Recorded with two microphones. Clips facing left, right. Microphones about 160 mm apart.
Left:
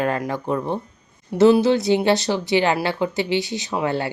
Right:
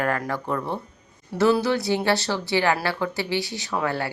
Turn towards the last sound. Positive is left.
turn(degrees=20)  # may be behind; listen again after turning